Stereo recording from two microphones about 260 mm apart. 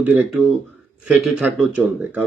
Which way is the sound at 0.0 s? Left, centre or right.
Centre.